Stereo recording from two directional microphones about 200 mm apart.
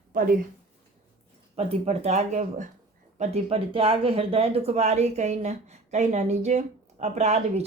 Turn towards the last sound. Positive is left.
turn(degrees=-35)  # may be behind; listen again after turning